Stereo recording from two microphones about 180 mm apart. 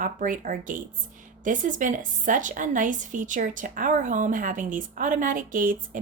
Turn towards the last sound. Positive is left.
turn(degrees=-50)  # may be behind; listen again after turning